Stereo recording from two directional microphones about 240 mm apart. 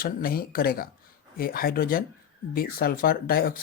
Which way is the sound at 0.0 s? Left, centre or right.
Left.